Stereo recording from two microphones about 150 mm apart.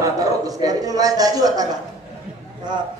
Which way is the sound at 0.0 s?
25° right (ahead or behind).